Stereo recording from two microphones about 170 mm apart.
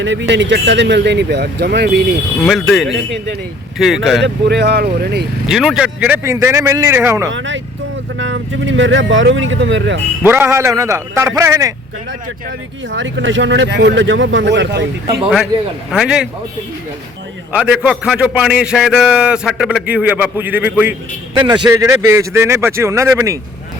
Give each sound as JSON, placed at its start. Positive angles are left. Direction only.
{"t": 0.0, "sound": "speech", "side_deg": -90}
{"t": 2.4, "sound": "speech", "side_deg": 0}
{"t": 4.2, "sound": "speech", "side_deg": -85}
{"t": 5.5, "sound": "a man's voice", "side_deg": 0}
{"t": 7.3, "sound": "speech", "side_deg": -90}
{"t": 10.2, "sound": "a man's voice", "side_deg": -15}
{"t": 12.9, "sound": "speech", "side_deg": -90}
{"t": 15.9, "sound": "speech", "side_deg": -5}
{"t": 17.5, "sound": "a man's voice", "side_deg": -5}
{"t": 21.3, "sound": "a man's voice", "side_deg": -25}